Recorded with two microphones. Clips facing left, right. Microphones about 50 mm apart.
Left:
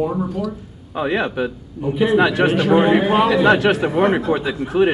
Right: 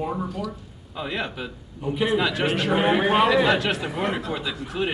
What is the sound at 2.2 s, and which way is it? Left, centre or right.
Speech, left.